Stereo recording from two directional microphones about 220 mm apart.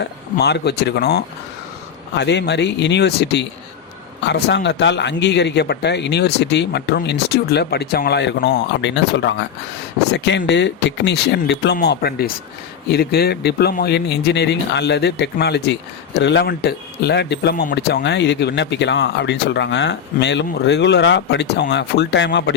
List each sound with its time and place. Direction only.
0.0 s speech: 50° left (ahead or behind)